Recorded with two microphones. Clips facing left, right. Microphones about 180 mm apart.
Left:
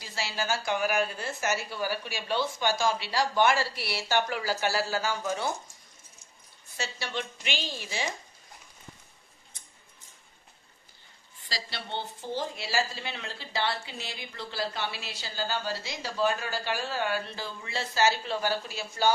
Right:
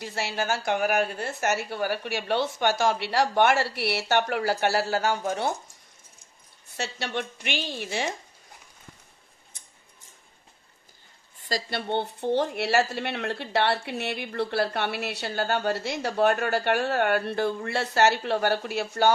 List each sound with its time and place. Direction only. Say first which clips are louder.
0.0 s speech: right 4 dB; 60° right (ahead or behind)
6.8 s speech: right 4 dB; 60° right (ahead or behind)
11.4 s speech: right 9 dB; 50° right (ahead or behind)